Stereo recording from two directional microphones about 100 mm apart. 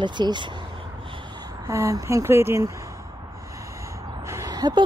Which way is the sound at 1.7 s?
30° right (ahead or behind).